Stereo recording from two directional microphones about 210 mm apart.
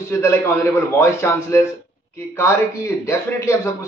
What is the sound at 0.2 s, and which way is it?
A man's voice, 10° left (ahead or behind).